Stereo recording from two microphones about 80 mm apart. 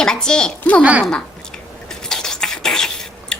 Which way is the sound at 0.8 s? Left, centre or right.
Centre.